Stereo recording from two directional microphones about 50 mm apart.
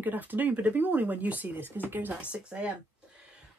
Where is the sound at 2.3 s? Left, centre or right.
Right.